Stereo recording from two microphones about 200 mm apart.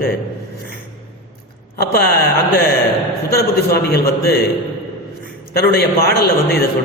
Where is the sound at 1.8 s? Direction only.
50° left (ahead or behind).